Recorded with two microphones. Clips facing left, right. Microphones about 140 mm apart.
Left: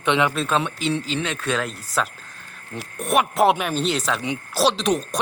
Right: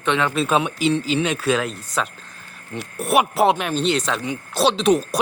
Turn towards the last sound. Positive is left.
turn(degrees=0)  # may be behind; listen again after turning